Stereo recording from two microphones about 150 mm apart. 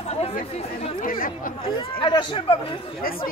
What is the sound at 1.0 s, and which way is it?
Speech, 65° left (ahead or behind).